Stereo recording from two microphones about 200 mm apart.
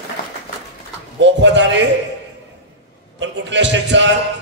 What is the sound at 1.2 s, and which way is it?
Speech, 65° right (ahead or behind).